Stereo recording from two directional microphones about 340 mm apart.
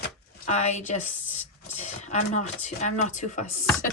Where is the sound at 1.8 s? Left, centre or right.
Centre.